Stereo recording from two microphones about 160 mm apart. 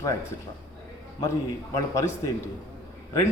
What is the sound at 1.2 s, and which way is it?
A man's voice, 20° left (ahead or behind).